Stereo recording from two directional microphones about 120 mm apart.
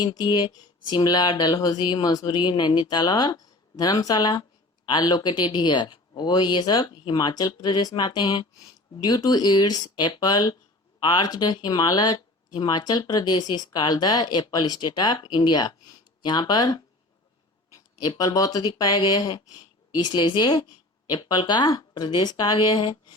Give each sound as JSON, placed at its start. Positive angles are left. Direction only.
{"t": 0.0, "sound": "speech", "side_deg": 35}
{"t": 18.0, "sound": "speech", "side_deg": 35}